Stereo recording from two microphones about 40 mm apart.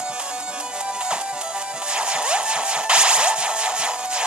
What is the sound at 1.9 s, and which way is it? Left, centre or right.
Music, right.